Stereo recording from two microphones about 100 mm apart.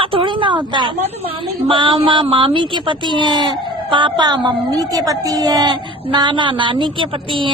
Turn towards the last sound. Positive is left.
turn(degrees=-60)  # may be behind; listen again after turning